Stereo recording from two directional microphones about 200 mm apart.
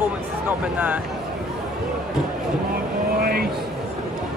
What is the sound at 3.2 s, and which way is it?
Speech, 50° right (ahead or behind).